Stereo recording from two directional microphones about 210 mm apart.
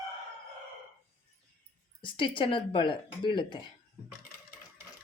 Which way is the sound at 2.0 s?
25° left (ahead or behind).